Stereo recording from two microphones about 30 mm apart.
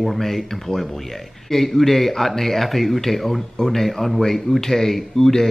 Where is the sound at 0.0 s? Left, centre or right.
Centre.